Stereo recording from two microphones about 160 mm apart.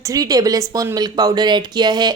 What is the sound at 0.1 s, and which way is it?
A woman's voice, 20° right (ahead or behind).